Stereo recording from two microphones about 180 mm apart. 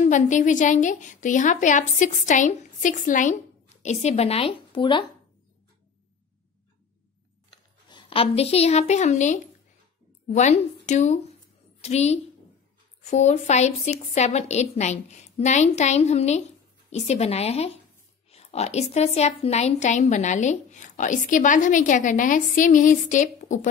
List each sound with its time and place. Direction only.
0.0 s a woman's voice: 40° left (ahead or behind); by 5.0 s 25° left (ahead or behind)
7.5 s a woman's voice: 25° left (ahead or behind); by 23.7 s 45° left (ahead or behind)